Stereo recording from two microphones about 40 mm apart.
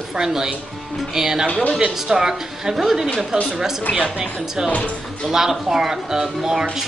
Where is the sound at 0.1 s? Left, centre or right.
Centre.